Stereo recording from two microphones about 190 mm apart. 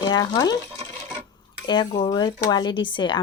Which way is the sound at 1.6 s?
25° left (ahead or behind).